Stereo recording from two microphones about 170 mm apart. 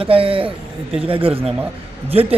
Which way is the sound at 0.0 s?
30° right (ahead or behind).